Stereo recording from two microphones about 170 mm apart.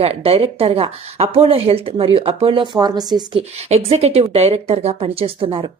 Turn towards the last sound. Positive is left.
turn(degrees=-30)  # may be behind; listen again after turning